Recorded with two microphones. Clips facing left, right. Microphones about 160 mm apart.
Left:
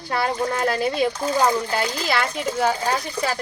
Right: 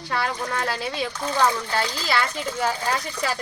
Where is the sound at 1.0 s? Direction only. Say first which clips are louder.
Left 7 dB; 35° left (ahead or behind).